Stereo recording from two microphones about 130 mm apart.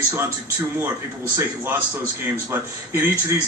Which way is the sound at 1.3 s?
20° right (ahead or behind).